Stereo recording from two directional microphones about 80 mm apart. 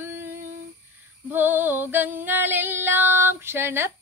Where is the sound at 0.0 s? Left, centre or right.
Right.